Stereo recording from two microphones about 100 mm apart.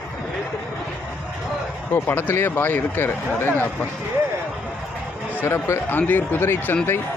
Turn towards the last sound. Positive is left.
turn(degrees=20)  # may be behind; listen again after turning